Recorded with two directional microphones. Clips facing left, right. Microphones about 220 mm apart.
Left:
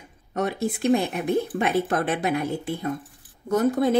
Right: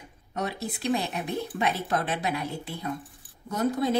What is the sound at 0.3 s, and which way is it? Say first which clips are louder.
A woman's voice: left 6 dB; 50° left (ahead or behind).